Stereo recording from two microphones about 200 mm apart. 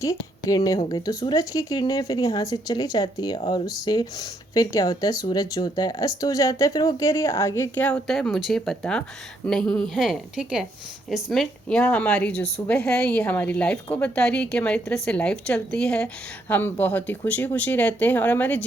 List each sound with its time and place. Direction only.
0.0 s a woman's voice: 15° left (ahead or behind)